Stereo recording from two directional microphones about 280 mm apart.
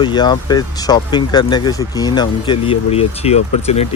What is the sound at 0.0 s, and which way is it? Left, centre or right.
Speech, centre.